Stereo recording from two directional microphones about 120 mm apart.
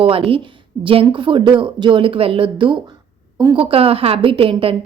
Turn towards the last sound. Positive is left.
turn(degrees=-50)  # may be behind; listen again after turning